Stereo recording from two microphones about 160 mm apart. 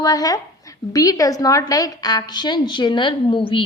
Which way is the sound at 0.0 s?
20° left (ahead or behind).